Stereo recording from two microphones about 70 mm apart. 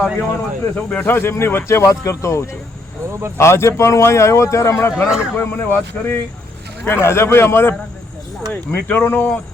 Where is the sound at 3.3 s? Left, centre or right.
Left.